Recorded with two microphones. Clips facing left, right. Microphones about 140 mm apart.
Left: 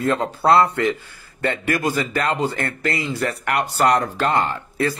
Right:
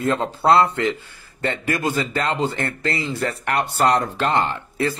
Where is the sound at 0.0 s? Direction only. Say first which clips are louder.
Even; 25° right (ahead or behind).